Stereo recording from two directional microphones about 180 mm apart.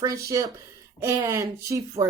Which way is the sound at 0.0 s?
20° right (ahead or behind).